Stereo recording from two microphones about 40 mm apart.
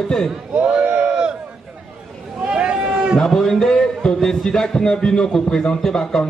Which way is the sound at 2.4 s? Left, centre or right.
Right.